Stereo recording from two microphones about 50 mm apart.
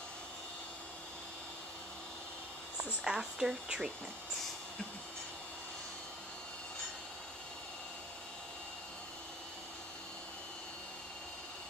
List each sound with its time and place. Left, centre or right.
3.1 s speech: centre